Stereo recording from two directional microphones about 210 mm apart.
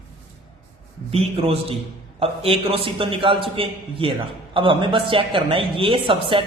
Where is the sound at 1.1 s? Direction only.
25° right (ahead or behind).